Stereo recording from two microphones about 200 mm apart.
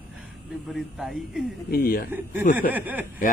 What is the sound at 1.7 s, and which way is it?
Speech, 50° left (ahead or behind).